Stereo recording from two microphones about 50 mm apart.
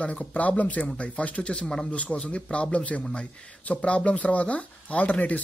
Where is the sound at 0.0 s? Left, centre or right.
Left.